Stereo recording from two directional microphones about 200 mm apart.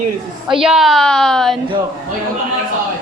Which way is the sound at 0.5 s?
5° right (ahead or behind).